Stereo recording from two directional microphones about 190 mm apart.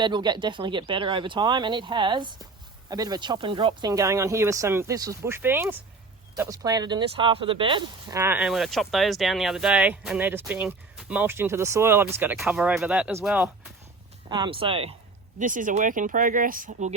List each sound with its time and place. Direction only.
0.0 s speech: 25° right (ahead or behind); by 13.7 s 5° right (ahead or behind)
14.3 s speech: 25° right (ahead or behind)
15.4 s speech: 45° right (ahead or behind)